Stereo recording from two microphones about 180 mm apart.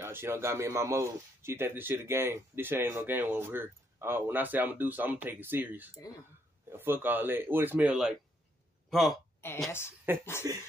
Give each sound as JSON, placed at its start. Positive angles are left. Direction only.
{"t": 0.0, "sound": "a man's voice", "side_deg": -15}
{"t": 9.7, "sound": "a woman's voice", "side_deg": 15}
{"t": 10.4, "sound": "a sound", "side_deg": -20}